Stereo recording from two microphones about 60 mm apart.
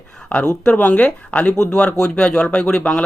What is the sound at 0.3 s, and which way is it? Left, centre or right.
Speech, left.